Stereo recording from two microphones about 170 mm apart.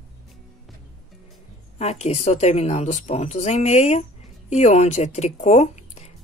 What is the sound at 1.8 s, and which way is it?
Speech, 40° left (ahead or behind).